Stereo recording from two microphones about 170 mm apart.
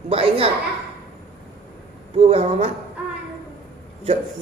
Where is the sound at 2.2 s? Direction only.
35° right (ahead or behind).